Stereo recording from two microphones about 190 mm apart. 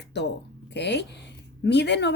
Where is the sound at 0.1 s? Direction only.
65° left (ahead or behind).